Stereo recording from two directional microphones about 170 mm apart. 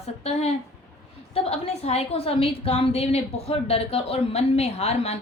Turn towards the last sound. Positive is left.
turn(degrees=35)  # may be behind; listen again after turning